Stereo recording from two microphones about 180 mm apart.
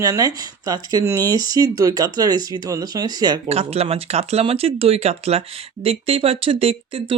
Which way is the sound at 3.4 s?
35° right (ahead or behind).